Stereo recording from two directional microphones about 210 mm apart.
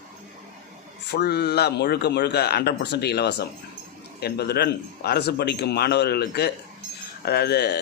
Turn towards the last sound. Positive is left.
turn(degrees=50)  # may be behind; listen again after turning